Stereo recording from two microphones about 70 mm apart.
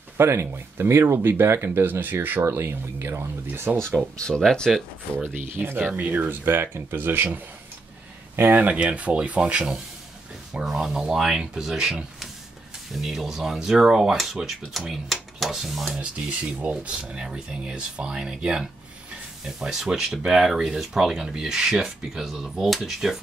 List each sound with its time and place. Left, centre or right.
0.2 s speech: right
3.7 s speech: right
4.2 s speech: centre
5.3 s speech: right
10.5 s speech: centre
16.0 s speech: centre